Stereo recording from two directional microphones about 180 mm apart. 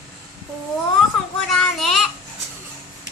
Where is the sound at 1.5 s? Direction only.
Centre (ahead or behind).